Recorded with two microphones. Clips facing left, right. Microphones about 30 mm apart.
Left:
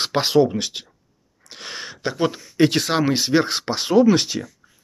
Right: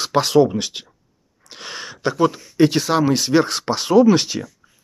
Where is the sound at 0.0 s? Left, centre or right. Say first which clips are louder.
Right 3 dB; left.